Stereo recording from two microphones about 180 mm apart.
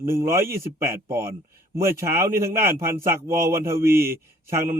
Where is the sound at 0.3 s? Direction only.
15° right (ahead or behind).